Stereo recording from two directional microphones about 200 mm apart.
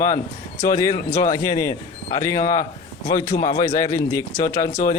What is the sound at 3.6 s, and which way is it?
A man's voice, 15° left (ahead or behind).